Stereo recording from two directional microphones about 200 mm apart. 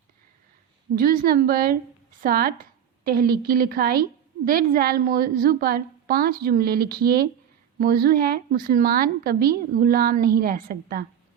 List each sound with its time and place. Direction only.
0.9 s a woman's voice: 45° right (ahead or behind)